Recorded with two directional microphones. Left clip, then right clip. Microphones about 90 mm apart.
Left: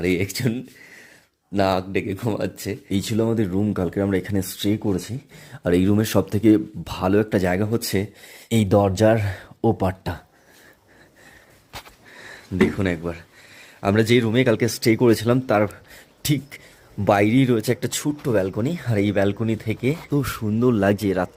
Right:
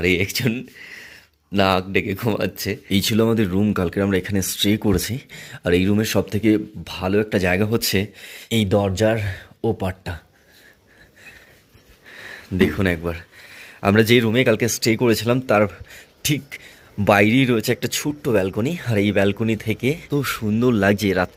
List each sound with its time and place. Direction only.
0.0 s speech: 25° left (ahead or behind)
4.8 s speech: 10° right (ahead or behind)
5.3 s speech: 15° left (ahead or behind)
5.6 s speech: 40° left (ahead or behind); by 6.9 s 55° left (ahead or behind)
6.9 s speech: 65° left (ahead or behind)
7.4 s speech: 30° left (ahead or behind)
8.4 s speech: 55° left (ahead or behind)
12.1 s speech: 15° left (ahead or behind); by 15.4 s 35° left (ahead or behind)
15.4 s speech: 15° left (ahead or behind)
15.9 s a sound: 35° left (ahead or behind)
17.0 s speech: 15° left (ahead or behind)
18.3 s speech: 15° left (ahead or behind)
20.1 s speech: 35° left (ahead or behind)